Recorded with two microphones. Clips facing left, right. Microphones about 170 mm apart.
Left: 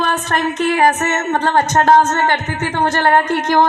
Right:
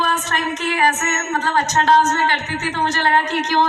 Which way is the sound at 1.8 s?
50° left (ahead or behind).